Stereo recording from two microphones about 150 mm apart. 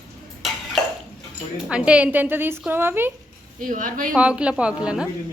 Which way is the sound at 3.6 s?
60° right (ahead or behind).